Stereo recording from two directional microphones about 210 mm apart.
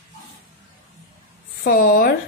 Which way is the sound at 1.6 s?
45° left (ahead or behind).